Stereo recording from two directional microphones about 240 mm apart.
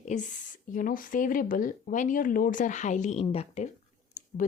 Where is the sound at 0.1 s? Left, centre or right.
Left.